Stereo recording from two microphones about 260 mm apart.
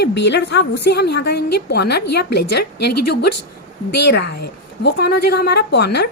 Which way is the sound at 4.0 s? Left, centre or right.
Left.